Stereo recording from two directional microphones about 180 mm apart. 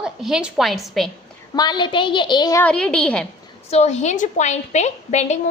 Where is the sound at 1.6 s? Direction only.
25° left (ahead or behind).